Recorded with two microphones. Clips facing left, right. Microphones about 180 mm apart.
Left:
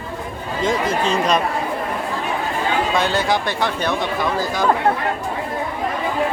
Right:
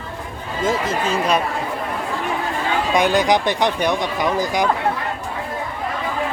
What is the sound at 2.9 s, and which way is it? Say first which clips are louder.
Speech: right 7 dB; 15° right (ahead or behind).